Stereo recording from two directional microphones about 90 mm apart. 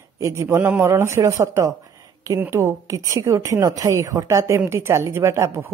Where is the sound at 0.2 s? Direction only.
35° right (ahead or behind).